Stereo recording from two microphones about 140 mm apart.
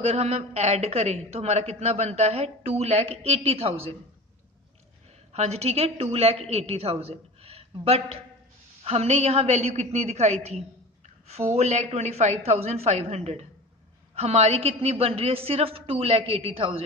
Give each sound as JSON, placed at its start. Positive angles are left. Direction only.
{"t": 0.0, "sound": "a man's voice", "side_deg": -50}
{"t": 5.3, "sound": "a woman's voice", "side_deg": -50}